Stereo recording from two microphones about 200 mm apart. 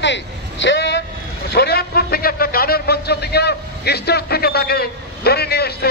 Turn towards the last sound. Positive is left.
turn(degrees=50)  # may be behind; listen again after turning